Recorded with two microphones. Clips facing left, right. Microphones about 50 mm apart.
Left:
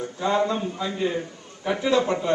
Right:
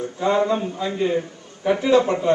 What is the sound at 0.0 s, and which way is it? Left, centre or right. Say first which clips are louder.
A man's voice: right 3 dB; right.